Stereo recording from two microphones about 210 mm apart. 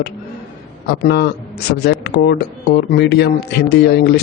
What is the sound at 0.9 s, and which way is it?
Speech, 50° left (ahead or behind).